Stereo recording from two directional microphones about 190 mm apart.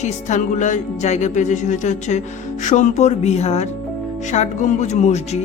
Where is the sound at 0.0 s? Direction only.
40° left (ahead or behind).